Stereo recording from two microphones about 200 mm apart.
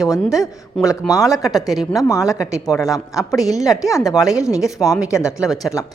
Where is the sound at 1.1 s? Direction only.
15° left (ahead or behind).